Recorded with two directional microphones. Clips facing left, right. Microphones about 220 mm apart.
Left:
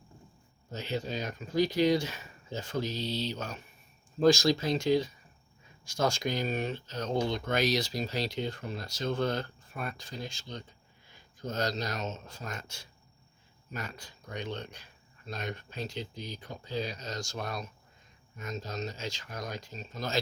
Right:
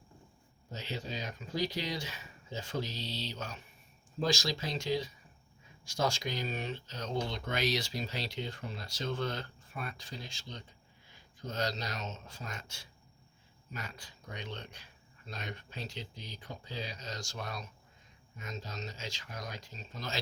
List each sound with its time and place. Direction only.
0.7 s speech: 50° left (ahead or behind)
14.3 s speech: 45° left (ahead or behind)
15.9 s speech: 45° left (ahead or behind)